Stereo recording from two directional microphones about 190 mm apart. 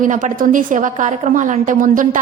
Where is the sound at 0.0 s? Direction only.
40° right (ahead or behind).